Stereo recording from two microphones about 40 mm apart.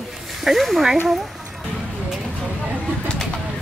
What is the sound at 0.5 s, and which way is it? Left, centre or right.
Speech, centre.